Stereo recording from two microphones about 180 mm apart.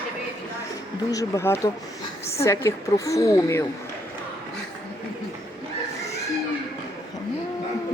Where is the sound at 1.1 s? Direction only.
15° left (ahead or behind).